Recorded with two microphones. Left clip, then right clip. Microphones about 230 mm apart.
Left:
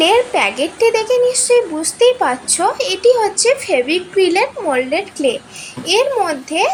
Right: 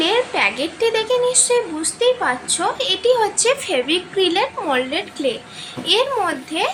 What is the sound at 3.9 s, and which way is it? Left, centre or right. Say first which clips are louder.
Speech: left 4 dB; right.